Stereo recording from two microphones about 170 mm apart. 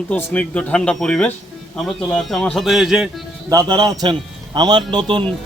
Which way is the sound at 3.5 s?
25° right (ahead or behind).